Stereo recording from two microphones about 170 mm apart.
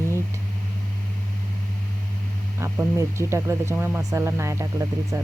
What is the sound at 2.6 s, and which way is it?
Speech, 15° right (ahead or behind).